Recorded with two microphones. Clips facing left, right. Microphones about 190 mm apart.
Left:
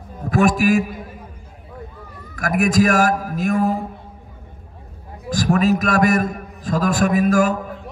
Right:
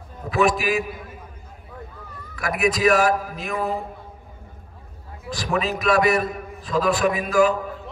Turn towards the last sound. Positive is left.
turn(degrees=45)  # may be behind; listen again after turning